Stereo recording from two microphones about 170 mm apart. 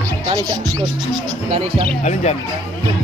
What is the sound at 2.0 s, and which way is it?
Speech, 40° left (ahead or behind).